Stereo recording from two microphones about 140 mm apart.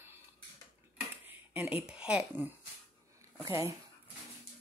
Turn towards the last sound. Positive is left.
turn(degrees=-20)  # may be behind; listen again after turning